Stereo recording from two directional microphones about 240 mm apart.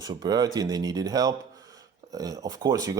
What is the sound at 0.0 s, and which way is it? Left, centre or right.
A man's voice, centre.